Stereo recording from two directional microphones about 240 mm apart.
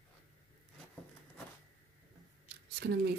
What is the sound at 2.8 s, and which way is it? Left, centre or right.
Speech, right.